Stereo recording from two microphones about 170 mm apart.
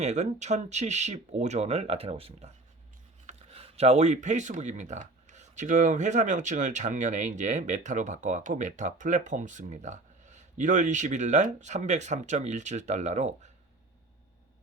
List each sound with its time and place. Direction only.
0.0 s speech: 40° right (ahead or behind)